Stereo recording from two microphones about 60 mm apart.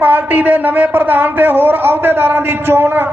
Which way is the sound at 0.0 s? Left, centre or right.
Right.